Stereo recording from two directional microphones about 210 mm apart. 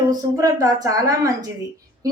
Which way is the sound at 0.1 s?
15° right (ahead or behind).